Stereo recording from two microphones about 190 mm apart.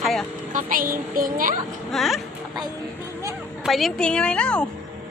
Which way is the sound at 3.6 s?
Centre (ahead or behind).